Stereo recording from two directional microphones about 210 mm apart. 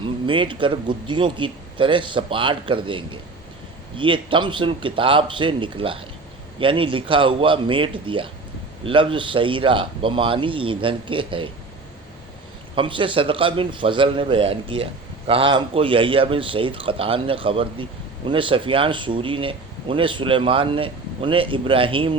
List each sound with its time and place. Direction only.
0.0 s speech: 25° right (ahead or behind)
12.7 s speech: 25° right (ahead or behind)